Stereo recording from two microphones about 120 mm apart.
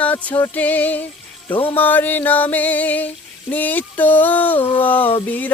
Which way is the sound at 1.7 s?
15° left (ahead or behind).